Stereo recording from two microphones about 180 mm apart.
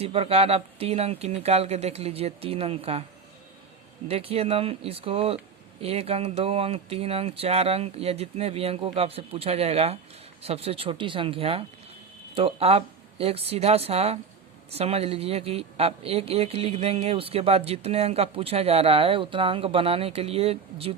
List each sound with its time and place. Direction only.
0.0 s speech: 35° right (ahead or behind)
4.1 s speech: 35° right (ahead or behind)